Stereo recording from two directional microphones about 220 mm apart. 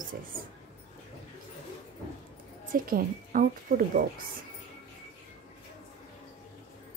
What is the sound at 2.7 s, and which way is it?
Speech, 40° right (ahead or behind).